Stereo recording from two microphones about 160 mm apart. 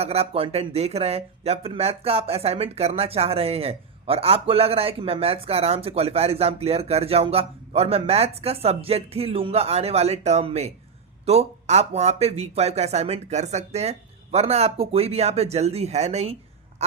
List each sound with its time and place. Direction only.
0.0 s speech: 40° right (ahead or behind)